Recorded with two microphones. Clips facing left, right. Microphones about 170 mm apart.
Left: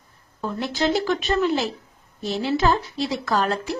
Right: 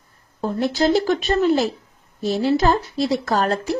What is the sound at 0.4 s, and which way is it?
A woman's voice, 40° right (ahead or behind).